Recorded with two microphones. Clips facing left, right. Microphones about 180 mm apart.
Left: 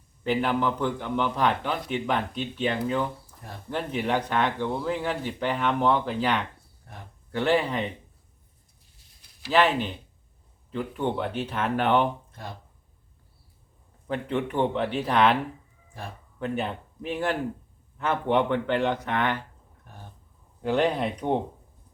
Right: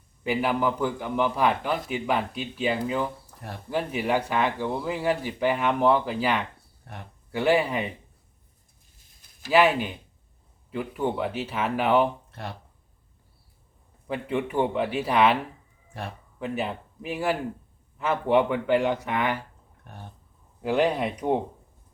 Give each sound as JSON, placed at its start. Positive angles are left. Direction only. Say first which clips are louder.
{"t": 0.3, "sound": "a man's voice", "louder": "even", "side_deg": -10}
{"t": 6.9, "sound": "speech", "louder": "right 4 dB", "side_deg": -70}
{"t": 7.3, "sound": "a man's voice", "louder": "right 1 dB", "side_deg": -10}
{"t": 9.5, "sound": "a man's voice", "louder": "right 2 dB", "side_deg": -10}
{"t": 14.1, "sound": "a man's voice", "louder": "even", "side_deg": -10}
{"t": 16.4, "sound": "a man's voice", "louder": "even", "side_deg": -5}
{"t": 20.6, "sound": "a man's voice", "louder": "right 1 dB", "side_deg": -10}